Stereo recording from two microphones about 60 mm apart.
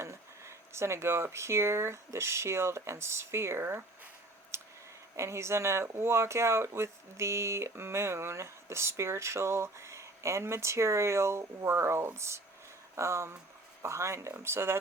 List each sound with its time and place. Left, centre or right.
0.0 s speech: right
4.5 s a sound: right
5.1 s speech: right